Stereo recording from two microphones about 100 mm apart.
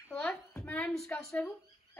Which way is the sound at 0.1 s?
10° left (ahead or behind).